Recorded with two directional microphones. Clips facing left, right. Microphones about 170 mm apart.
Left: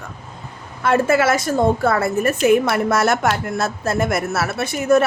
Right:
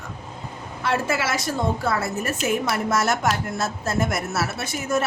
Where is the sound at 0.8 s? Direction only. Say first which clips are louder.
Left 8 dB; 50° left (ahead or behind).